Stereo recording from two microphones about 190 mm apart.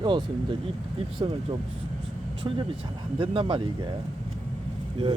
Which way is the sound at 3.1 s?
30° right (ahead or behind).